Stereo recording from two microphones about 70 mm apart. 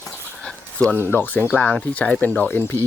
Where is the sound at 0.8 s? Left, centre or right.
Left.